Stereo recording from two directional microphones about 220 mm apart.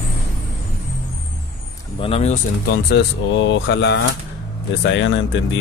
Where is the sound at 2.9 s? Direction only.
55° left (ahead or behind).